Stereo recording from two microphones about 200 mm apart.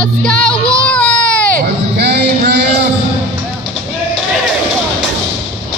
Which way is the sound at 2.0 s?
55° right (ahead or behind).